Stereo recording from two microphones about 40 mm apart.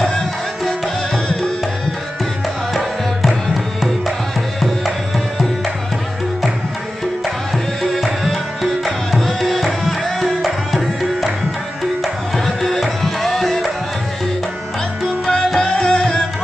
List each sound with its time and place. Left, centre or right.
2.7 s music: centre
4.6 s music: centre
7.5 s tabla: centre
8.8 s music: centre
10.2 s tabla: centre
12.4 s tabla: centre
15.2 s music: centre